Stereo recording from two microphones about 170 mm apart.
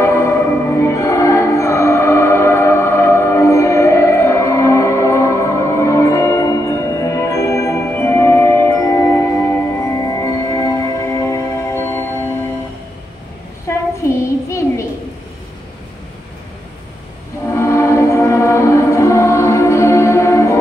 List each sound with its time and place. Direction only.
0.0 s music: 15° left (ahead or behind)
13.7 s a sound: 15° left (ahead or behind)
17.5 s music: 15° left (ahead or behind)